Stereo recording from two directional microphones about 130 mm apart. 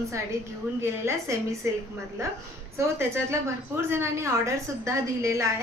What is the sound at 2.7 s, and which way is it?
A woman's voice, 20° right (ahead or behind).